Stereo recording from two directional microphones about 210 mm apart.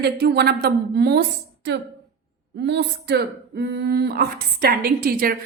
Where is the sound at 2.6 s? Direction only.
50° right (ahead or behind).